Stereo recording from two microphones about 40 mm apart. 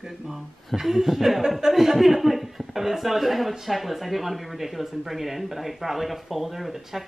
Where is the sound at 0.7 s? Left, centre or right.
Centre.